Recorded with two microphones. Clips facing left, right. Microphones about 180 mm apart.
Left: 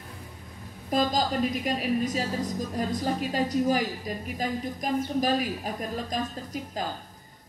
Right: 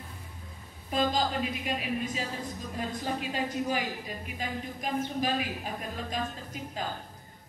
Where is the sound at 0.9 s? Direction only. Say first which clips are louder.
Left 3 dB; 40° left (ahead or behind).